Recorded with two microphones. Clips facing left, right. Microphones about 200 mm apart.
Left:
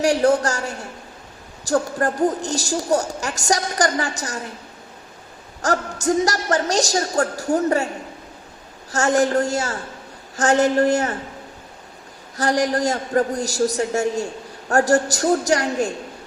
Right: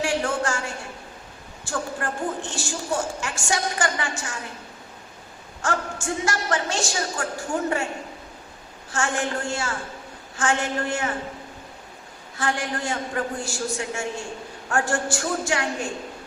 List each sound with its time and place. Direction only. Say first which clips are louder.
0.0 s a woman's voice: left 8 dB; 40° left (ahead or behind)
5.6 s a woman's voice: left 6 dB; 40° left (ahead or behind)
8.9 s a woman's voice: left 8 dB; 40° left (ahead or behind)
12.4 s a woman's voice: left 8 dB; 40° left (ahead or behind)